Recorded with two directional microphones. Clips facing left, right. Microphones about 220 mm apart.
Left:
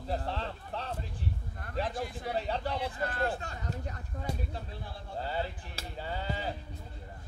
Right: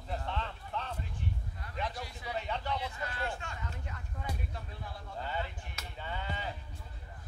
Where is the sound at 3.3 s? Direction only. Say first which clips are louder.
Left 5 dB; 35° left (ahead or behind).